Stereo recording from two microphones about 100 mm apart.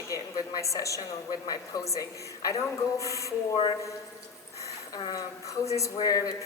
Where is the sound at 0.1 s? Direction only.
35° left (ahead or behind).